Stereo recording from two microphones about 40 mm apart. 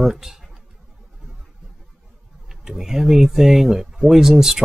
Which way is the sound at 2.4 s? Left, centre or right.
Centre.